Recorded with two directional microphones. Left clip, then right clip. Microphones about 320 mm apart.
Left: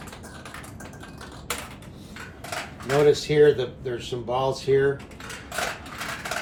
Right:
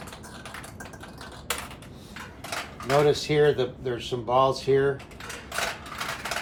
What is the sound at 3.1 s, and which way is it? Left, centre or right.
Speech, centre.